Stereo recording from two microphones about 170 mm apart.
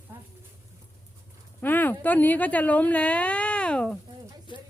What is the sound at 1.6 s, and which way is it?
Speech, 10° left (ahead or behind).